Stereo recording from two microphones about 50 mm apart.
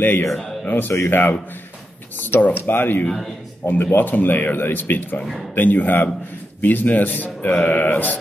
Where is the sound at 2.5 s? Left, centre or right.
Left.